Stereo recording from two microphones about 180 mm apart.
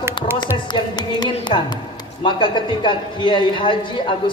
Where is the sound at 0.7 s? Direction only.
25° left (ahead or behind).